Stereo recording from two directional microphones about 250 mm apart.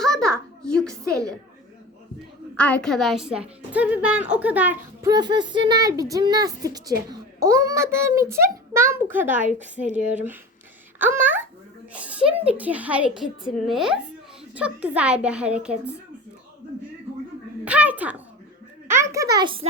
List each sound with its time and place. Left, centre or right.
0.0 s a sound: centre
2.6 s a woman's voice: centre
9.4 s a woman's voice: right
10.9 s a woman's voice: centre
17.7 s a child's voice: centre